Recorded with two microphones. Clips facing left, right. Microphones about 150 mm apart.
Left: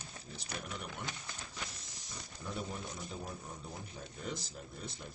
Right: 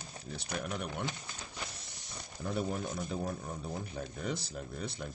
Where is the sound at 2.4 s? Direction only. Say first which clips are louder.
Right 7 dB; 60° right (ahead or behind).